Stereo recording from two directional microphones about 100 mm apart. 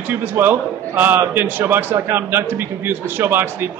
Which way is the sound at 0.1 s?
20° right (ahead or behind).